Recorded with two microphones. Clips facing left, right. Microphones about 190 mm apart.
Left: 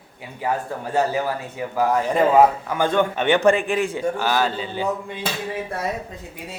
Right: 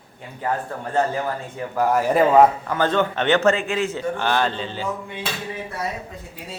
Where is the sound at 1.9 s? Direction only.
5° right (ahead or behind).